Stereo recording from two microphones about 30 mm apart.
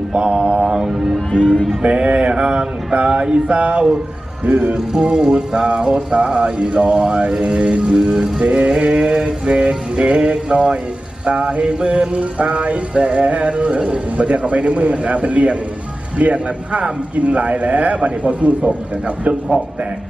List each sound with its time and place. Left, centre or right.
0.1 s mantra: right
0.7 s music: right
1.8 s a man's voice: right
2.1 s music: right
4.5 s a man's voice: right
5.1 s music: right
7.9 s music: right
8.5 s music: right
12.2 s a man's voice: right